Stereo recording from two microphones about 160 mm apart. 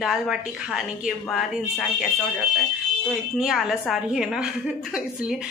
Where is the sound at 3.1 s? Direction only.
Centre (ahead or behind).